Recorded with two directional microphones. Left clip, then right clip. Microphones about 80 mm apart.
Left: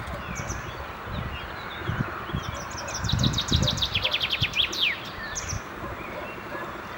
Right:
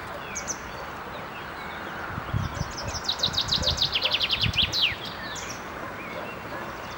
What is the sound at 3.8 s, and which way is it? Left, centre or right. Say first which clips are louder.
Bird: right 1 dB; centre.